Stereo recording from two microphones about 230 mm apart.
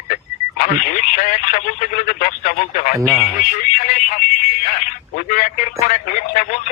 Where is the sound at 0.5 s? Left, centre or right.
Left.